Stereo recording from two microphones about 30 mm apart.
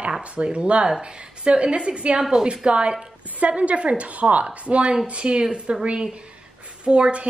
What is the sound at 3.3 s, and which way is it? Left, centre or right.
A woman's voice, right.